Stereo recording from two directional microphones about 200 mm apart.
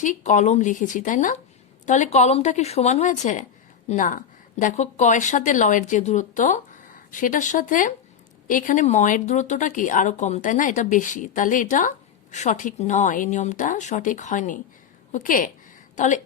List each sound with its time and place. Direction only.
0.0 s speech: 40° left (ahead or behind)